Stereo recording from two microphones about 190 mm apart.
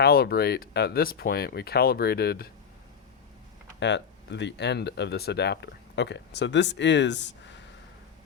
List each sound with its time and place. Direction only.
0.0 s speech: 55° left (ahead or behind)
3.8 s speech: 65° left (ahead or behind)